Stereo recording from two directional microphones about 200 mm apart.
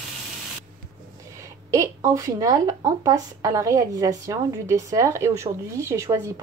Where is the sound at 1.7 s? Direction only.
15° right (ahead or behind).